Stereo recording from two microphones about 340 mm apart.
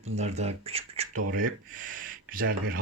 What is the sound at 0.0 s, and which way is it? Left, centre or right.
Speech, centre.